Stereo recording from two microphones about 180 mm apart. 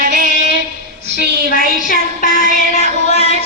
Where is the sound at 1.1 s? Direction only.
55° left (ahead or behind).